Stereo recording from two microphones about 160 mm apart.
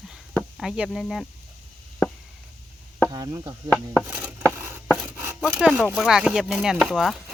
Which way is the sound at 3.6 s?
10° left (ahead or behind).